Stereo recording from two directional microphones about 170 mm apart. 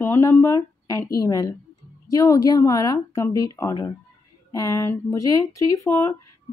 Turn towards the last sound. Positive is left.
turn(degrees=20)  # may be behind; listen again after turning